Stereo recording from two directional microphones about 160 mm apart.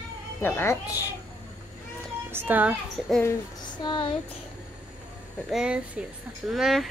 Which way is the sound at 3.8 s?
30° left (ahead or behind).